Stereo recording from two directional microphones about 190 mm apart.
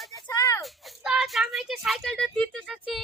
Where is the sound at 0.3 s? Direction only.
20° left (ahead or behind).